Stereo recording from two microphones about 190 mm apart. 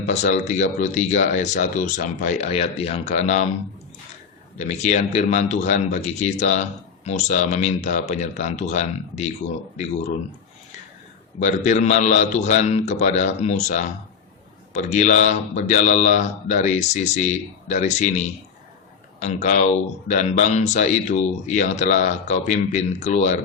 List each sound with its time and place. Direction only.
0.0 s a man's voice: 35° left (ahead or behind)
4.5 s a man's voice: 35° left (ahead or behind)
11.3 s a man's voice: 40° left (ahead or behind)